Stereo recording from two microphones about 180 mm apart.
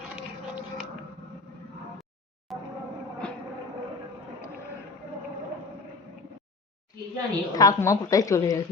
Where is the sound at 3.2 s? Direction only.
5° left (ahead or behind).